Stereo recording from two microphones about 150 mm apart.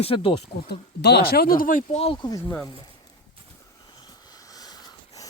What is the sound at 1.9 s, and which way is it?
Speech, 40° left (ahead or behind).